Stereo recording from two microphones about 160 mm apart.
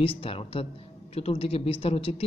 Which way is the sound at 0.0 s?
35° left (ahead or behind).